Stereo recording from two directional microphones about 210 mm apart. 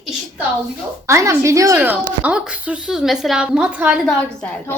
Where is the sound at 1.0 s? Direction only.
15° right (ahead or behind).